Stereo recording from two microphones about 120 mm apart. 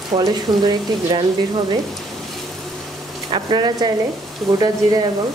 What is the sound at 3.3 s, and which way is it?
Speech, 35° right (ahead or behind).